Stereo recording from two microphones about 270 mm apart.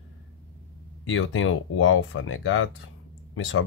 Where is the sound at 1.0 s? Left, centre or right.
Left.